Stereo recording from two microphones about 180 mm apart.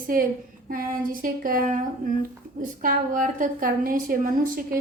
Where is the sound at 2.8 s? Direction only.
50° right (ahead or behind).